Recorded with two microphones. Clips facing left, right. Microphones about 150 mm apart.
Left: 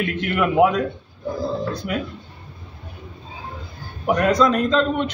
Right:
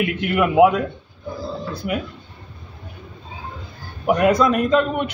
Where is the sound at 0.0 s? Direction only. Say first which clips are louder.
Right 2 dB; 5° right (ahead or behind).